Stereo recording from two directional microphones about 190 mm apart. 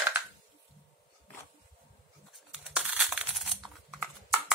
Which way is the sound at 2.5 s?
5° right (ahead or behind).